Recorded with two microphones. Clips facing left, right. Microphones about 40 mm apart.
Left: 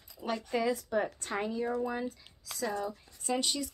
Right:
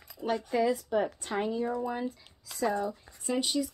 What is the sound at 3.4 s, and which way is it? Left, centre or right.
Speech, centre.